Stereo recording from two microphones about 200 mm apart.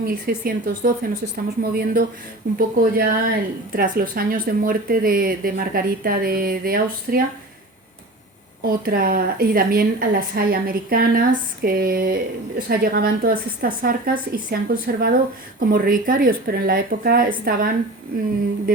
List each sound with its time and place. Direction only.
0.0 s a woman's voice: 45° right (ahead or behind)
8.6 s a woman's voice: 50° right (ahead or behind)